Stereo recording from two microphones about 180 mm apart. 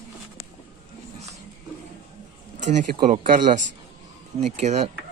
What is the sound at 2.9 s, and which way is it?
Speech, 50° right (ahead or behind).